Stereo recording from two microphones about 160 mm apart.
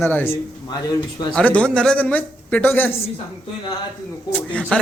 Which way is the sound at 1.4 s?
5° left (ahead or behind).